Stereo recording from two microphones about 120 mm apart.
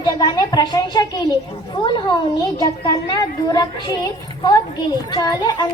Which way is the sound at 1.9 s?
40° left (ahead or behind).